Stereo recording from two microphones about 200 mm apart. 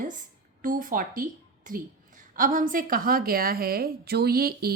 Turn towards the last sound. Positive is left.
turn(degrees=-50)  # may be behind; listen again after turning